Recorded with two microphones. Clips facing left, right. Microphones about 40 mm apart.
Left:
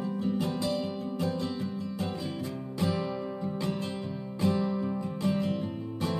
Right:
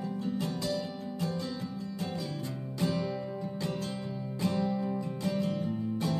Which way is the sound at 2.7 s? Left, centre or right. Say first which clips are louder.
Left 1 dB; centre.